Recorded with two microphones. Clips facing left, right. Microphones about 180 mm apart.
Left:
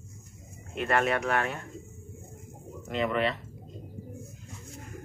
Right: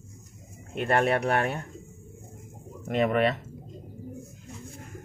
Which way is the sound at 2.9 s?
50° right (ahead or behind).